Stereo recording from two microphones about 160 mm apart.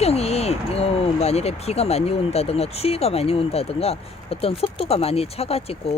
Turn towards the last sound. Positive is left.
turn(degrees=40)  # may be behind; listen again after turning